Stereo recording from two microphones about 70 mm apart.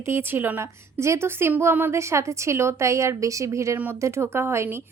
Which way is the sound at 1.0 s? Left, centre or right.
Right.